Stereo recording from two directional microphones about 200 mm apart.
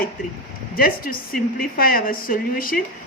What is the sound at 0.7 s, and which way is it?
A woman's voice, 45° left (ahead or behind).